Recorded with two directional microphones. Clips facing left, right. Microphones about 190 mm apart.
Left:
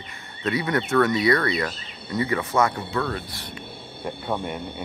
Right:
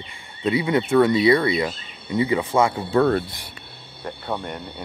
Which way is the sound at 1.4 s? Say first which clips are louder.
Right 3 dB; 15° right (ahead or behind).